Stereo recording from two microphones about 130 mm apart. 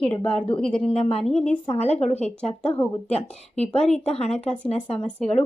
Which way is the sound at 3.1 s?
55° left (ahead or behind).